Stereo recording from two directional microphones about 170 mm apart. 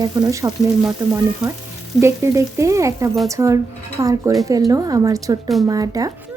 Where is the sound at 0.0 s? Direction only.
20° right (ahead or behind).